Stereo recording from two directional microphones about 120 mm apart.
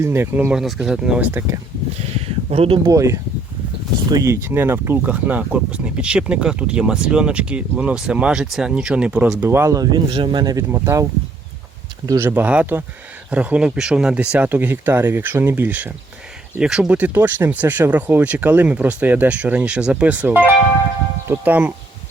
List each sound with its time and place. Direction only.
0.0 s speech: 20° right (ahead or behind)
0.5 s speech: 5° right (ahead or behind)
2.0 s a sound: 55° right (ahead or behind)
2.8 s speech: 25° right (ahead or behind)
10.1 s speech: 40° right (ahead or behind); by 11.0 s 25° right (ahead or behind)
12.0 s speech: 25° right (ahead or behind)
16.6 s speech: 5° right (ahead or behind)